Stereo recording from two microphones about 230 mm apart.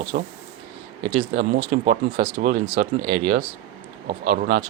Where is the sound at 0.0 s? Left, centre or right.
Right.